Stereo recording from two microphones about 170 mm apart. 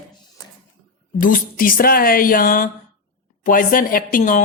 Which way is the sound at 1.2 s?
55° left (ahead or behind).